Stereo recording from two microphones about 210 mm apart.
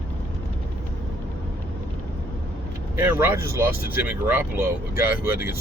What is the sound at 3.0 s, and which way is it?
Speech, 10° right (ahead or behind).